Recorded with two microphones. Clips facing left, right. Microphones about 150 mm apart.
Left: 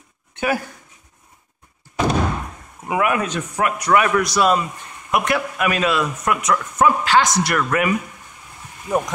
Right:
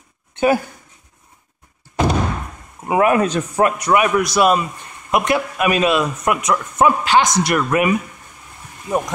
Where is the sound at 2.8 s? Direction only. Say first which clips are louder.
Right 5 dB; 35° right (ahead or behind).